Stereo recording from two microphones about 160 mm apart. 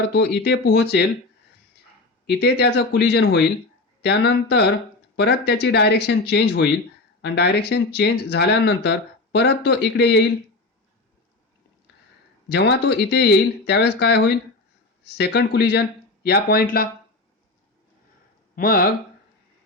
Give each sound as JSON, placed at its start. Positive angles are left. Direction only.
{"t": 0.1, "sound": "speech", "side_deg": 90}
{"t": 2.2, "sound": "speech", "side_deg": 90}
{"t": 12.5, "sound": "speech", "side_deg": 90}
{"t": 18.5, "sound": "speech", "side_deg": 65}